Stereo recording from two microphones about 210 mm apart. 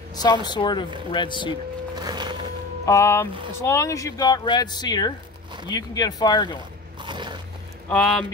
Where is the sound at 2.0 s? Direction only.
20° right (ahead or behind).